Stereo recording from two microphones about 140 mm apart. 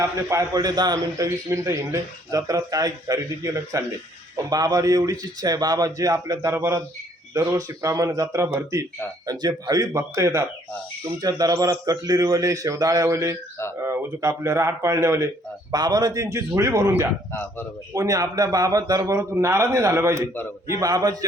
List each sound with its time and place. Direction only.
0.0 s a man's voice: 20° right (ahead or behind)